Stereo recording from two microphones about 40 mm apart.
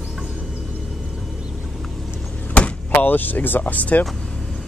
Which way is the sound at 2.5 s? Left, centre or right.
Left.